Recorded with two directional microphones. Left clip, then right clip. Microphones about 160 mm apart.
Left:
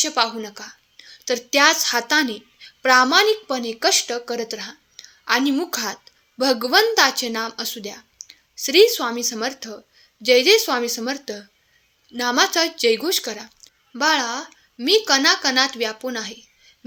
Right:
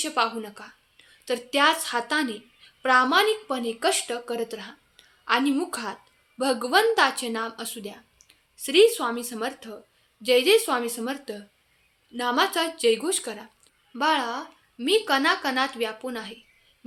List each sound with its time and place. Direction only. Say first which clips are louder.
0.0 s a woman's voice: left 5 dB; 25° left (ahead or behind)